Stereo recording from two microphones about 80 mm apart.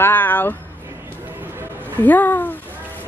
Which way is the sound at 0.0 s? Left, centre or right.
Left.